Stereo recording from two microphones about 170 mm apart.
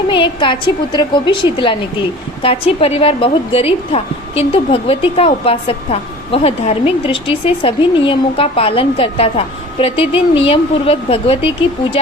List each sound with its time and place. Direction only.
0.1 s a woman's voice: 30° left (ahead or behind)